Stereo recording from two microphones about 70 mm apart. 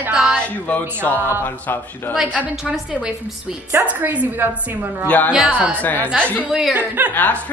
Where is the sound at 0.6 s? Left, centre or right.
Left.